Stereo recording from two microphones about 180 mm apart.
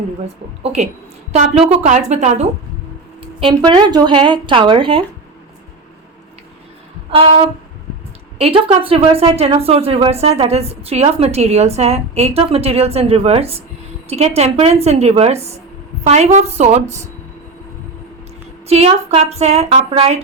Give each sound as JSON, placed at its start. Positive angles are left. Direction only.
{"t": 0.6, "sound": "a woman's voice", "side_deg": -40}
{"t": 7.1, "sound": "a woman's voice", "side_deg": -30}
{"t": 18.7, "sound": "a woman's voice", "side_deg": -35}